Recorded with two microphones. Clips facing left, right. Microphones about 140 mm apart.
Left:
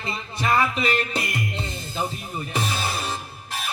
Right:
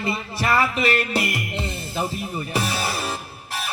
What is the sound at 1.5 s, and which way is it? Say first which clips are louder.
Music: right 3 dB; 30° right (ahead or behind).